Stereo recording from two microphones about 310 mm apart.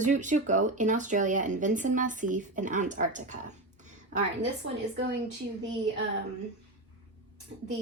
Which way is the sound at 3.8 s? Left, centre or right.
Right.